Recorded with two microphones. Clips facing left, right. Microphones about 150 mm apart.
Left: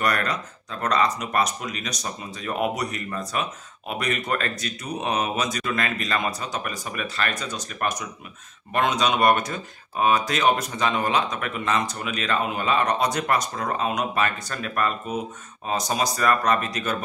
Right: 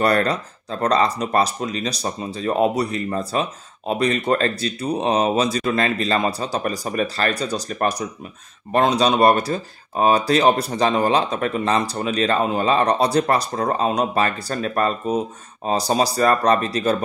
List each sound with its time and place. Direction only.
0.0 s speech: 30° right (ahead or behind)